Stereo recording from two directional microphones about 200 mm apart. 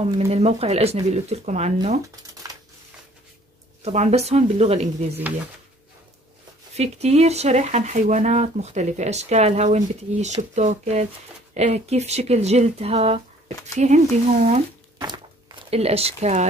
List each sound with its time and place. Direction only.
0.1 s speech: 30° right (ahead or behind)
3.8 s speech: 35° right (ahead or behind)
6.7 s speech: 30° right (ahead or behind)
15.0 s a sound: 20° right (ahead or behind)